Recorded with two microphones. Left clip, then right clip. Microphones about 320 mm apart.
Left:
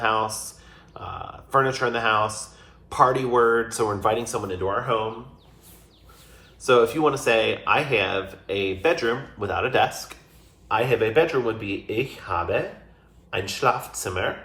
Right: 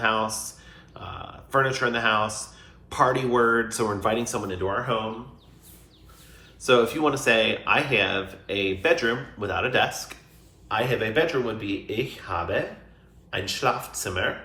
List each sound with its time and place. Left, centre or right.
0.0 s speech: centre
6.6 s speech: centre